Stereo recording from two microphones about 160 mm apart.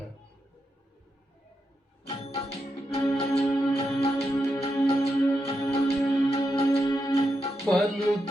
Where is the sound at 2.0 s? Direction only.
40° left (ahead or behind).